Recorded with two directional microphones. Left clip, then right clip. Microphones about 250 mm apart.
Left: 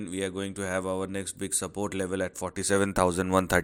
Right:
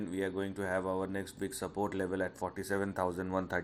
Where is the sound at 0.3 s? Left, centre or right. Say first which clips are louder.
Left 4 dB; left.